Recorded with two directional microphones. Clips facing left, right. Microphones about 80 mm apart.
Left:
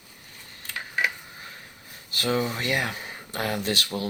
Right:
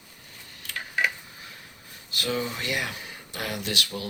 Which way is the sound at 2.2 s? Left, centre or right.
Left.